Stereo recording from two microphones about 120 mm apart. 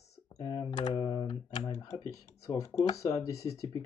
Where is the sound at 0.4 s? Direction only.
35° left (ahead or behind).